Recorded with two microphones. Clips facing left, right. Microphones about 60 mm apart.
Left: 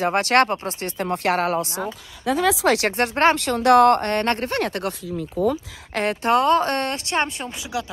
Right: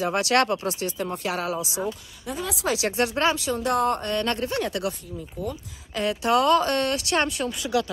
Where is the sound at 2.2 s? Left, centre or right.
Left.